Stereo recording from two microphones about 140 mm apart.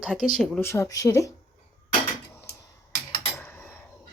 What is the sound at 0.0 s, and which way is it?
Speech, 5° left (ahead or behind).